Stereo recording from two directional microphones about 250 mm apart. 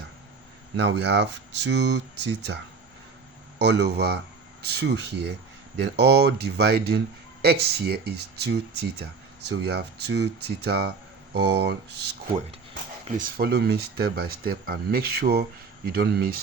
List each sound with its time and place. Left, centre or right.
0.8 s speech: right
3.6 s speech: right
13.1 s speech: right